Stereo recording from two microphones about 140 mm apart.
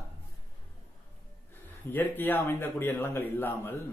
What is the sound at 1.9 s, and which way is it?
Speech, 15° left (ahead or behind).